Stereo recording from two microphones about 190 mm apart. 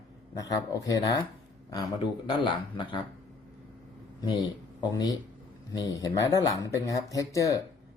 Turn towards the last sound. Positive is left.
turn(degrees=20)  # may be behind; listen again after turning